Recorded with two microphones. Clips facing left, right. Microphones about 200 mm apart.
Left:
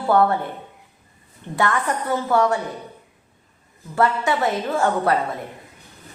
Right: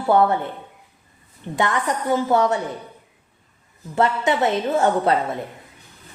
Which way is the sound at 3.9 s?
20° right (ahead or behind).